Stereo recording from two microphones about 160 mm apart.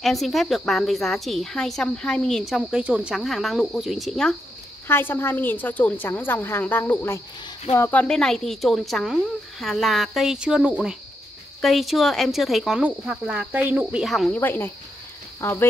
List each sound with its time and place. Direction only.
0.0 s a woman's voice: centre (ahead or behind)
4.8 s a woman's voice: 15° left (ahead or behind); by 14.0 s 10° right (ahead or behind)
14.0 s a woman's voice: centre (ahead or behind)
14.4 s a woman's voice: 15° left (ahead or behind)